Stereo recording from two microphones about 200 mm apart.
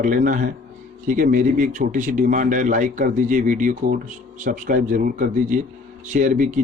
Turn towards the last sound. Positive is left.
turn(degrees=-40)  # may be behind; listen again after turning